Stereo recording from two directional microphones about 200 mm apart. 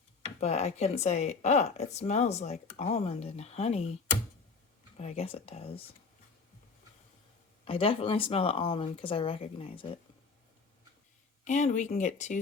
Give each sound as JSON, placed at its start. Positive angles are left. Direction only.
{"t": 0.3, "sound": "speech", "side_deg": 35}
{"t": 4.9, "sound": "speech", "side_deg": 30}
{"t": 7.6, "sound": "speech", "side_deg": 30}
{"t": 11.4, "sound": "speech", "side_deg": 35}